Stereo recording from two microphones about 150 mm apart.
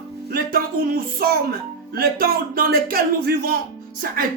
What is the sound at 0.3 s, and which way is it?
Speech, 75° right (ahead or behind).